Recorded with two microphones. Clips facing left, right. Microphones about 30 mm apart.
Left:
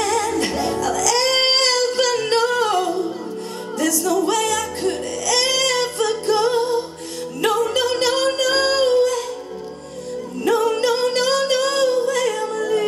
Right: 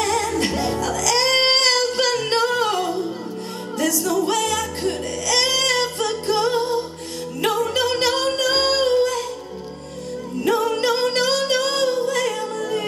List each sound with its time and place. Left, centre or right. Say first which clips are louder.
0.0 s music: left 1 dB; centre
8.4 s humming: left 1 dB; centre
10.4 s music: left 2 dB; centre